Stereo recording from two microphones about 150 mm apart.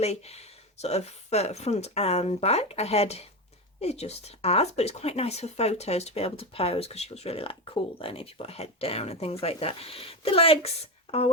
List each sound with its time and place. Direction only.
0.0 s speech: 45° left (ahead or behind)